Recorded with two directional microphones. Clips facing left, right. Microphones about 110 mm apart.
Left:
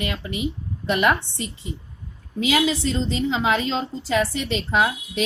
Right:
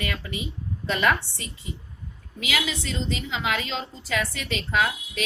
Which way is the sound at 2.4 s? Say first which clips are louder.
Left 8 dB; 35° left (ahead or behind).